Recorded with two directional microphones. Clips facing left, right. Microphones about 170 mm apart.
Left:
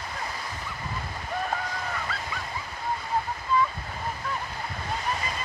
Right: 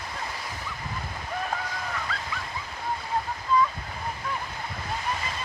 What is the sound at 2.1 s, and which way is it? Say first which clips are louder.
Waves: even; 5° left (ahead or behind).